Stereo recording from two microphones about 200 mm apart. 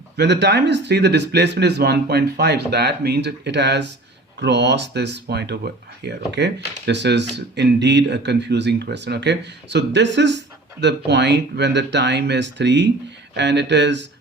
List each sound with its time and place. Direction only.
0.2 s speech: 60° right (ahead or behind)